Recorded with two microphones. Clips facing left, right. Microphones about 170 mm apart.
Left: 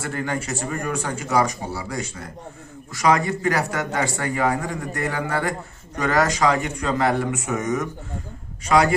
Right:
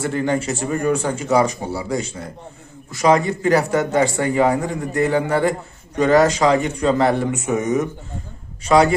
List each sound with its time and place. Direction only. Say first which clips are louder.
0.0 s speech: right 6 dB; 25° right (ahead or behind)